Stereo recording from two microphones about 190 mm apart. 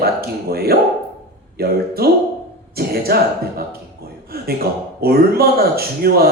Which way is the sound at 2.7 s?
55° right (ahead or behind).